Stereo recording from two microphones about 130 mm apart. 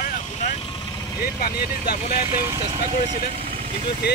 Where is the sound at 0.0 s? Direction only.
80° left.